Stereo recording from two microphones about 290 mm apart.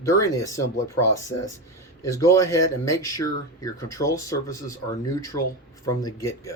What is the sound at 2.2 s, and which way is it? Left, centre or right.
Speech, centre.